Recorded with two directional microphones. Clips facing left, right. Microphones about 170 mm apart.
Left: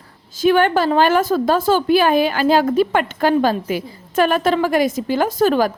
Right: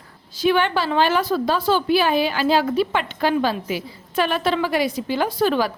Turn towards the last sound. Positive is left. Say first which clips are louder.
# left 4 dB
turn(degrees=45)  # may be behind; listen again after turning